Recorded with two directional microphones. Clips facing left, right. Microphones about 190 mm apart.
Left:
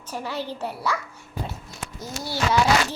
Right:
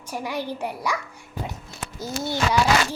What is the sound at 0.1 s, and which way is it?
Speech, 15° right (ahead or behind).